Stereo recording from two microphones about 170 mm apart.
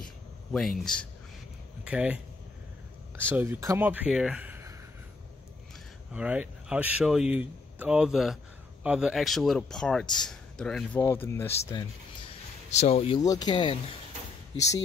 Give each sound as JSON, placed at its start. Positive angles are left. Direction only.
{"t": 0.5, "sound": "speech", "side_deg": 0}
{"t": 3.3, "sound": "speech", "side_deg": -15}
{"t": 6.1, "sound": "a man's voice", "side_deg": -10}
{"t": 11.0, "sound": "speech", "side_deg": 15}
{"t": 12.6, "sound": "speech", "side_deg": 40}
{"t": 13.2, "sound": "speech", "side_deg": 20}